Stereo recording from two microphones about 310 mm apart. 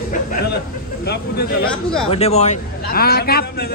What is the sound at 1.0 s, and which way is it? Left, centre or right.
Speech, left.